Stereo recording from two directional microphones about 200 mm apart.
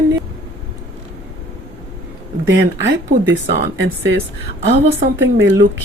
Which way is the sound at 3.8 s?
60° right (ahead or behind).